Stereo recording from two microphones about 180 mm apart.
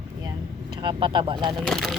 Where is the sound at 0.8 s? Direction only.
25° right (ahead or behind).